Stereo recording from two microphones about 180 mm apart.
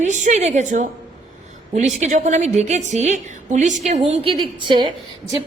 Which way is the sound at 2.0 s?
40° right (ahead or behind).